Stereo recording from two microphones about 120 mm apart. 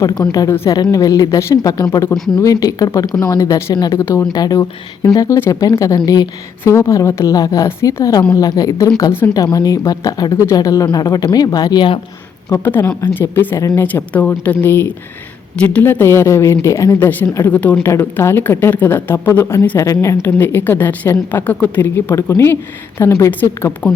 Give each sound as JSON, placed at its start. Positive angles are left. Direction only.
{"t": 0.2, "sound": "speech", "side_deg": 30}
{"t": 12.5, "sound": "a woman's voice", "side_deg": 20}